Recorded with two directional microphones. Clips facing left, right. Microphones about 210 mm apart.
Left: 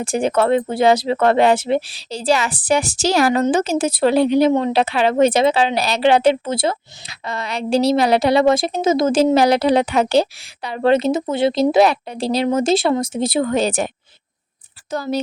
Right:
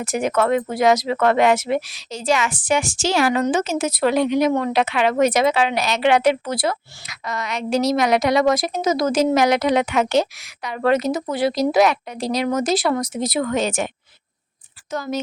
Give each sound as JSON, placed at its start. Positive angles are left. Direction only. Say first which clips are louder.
{"t": 0.0, "sound": "a woman's voice", "louder": "left 3 dB", "side_deg": 30}